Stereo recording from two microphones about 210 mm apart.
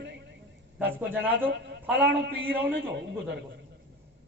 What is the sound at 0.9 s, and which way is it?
Speech, 10° right (ahead or behind).